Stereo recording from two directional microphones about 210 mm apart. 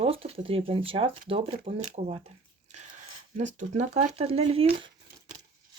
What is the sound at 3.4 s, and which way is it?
Speech, 35° right (ahead or behind).